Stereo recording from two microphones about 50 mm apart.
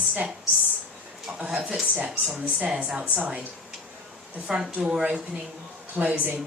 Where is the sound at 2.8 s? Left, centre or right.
Right.